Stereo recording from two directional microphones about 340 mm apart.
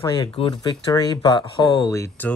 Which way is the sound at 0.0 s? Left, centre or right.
Centre.